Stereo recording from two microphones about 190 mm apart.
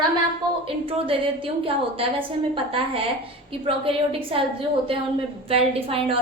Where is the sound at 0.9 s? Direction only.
30° right (ahead or behind).